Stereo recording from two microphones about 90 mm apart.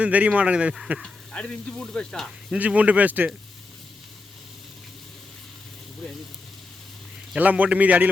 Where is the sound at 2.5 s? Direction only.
15° right (ahead or behind).